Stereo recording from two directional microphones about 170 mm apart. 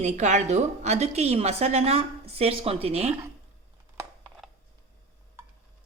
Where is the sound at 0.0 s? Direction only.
45° right (ahead or behind).